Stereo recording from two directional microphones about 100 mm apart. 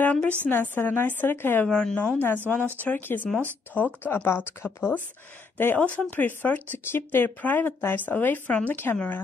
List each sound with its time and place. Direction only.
0.0 s a woman's voice: 15° left (ahead or behind)
1.7 s speech: 10° left (ahead or behind)